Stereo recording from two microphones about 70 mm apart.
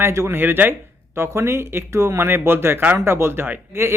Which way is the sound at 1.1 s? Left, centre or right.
Right.